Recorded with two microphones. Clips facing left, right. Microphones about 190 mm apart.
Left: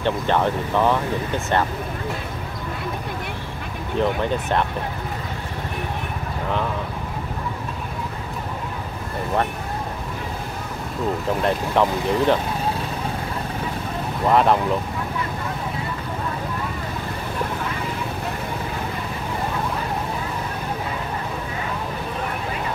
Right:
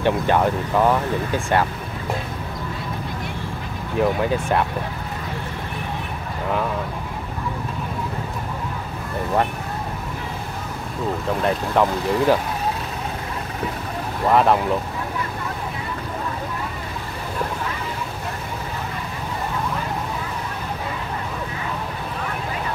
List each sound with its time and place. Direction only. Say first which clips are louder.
0.0 s speech: right 2 dB; 10° right (ahead or behind)
4.0 s speech: right 2 dB; 10° right (ahead or behind)
11.4 s speech: right 1 dB; centre (ahead or behind)
14.3 s speech: right 1 dB; centre (ahead or behind)